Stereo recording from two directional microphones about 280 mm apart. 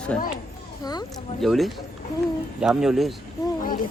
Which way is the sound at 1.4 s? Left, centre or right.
Centre.